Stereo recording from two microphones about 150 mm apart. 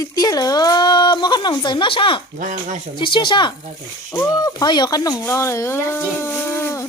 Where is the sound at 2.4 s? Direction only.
60° right (ahead or behind).